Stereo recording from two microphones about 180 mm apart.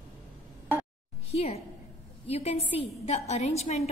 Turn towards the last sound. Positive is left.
turn(degrees=35)  # may be behind; listen again after turning